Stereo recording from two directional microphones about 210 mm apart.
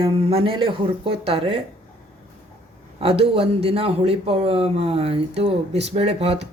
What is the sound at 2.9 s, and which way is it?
A woman's voice, 25° right (ahead or behind).